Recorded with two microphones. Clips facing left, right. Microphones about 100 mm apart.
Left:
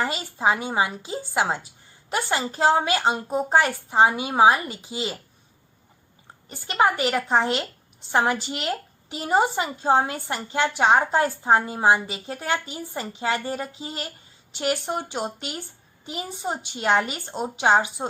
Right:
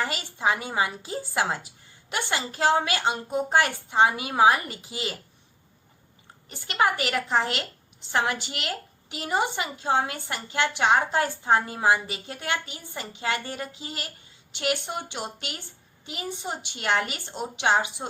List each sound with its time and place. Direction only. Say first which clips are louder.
0.0 s a woman's voice: left 3 dB; 30° left (ahead or behind)
6.7 s a woman's voice: left 3 dB; 30° left (ahead or behind)